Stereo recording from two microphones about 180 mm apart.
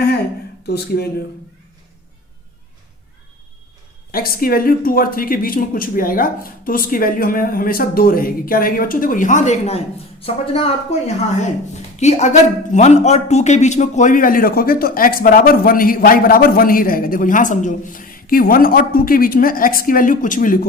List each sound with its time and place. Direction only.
0.6 s speech: 65° left (ahead or behind)
4.1 s speech: 55° left (ahead or behind)